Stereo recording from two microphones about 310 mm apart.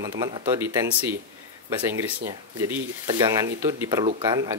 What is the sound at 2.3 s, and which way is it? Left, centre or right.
Speech, centre.